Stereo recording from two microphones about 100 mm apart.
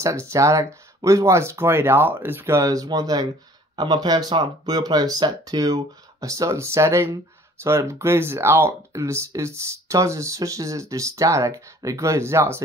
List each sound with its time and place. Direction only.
0.0 s speech: 30° right (ahead or behind)